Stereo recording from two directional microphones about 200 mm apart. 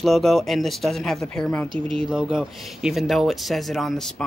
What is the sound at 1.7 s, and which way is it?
Speech, 25° right (ahead or behind).